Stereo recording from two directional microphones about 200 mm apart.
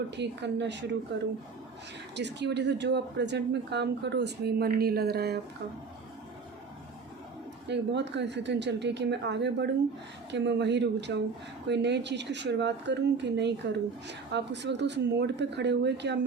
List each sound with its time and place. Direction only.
0.2 s speech: 60° right (ahead or behind)
7.7 s speech: 60° right (ahead or behind)